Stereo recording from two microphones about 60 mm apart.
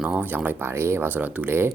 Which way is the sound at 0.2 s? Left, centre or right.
Right.